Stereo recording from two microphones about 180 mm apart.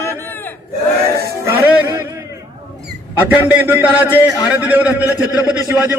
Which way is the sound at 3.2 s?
10° right (ahead or behind).